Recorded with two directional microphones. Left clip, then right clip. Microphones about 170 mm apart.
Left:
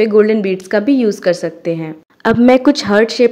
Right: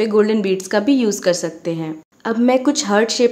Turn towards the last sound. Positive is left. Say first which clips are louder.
# left 4 dB
turn(degrees=20)  # may be behind; listen again after turning